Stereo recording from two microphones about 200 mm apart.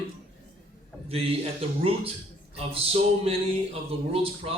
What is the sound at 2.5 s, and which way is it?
A man's voice, 30° right (ahead or behind).